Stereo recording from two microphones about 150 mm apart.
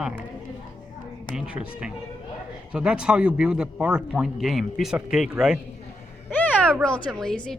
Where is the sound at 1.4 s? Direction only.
5° right (ahead or behind).